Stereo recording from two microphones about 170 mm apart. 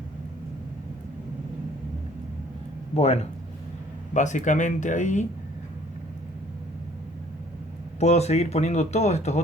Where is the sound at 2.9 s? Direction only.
40° left (ahead or behind).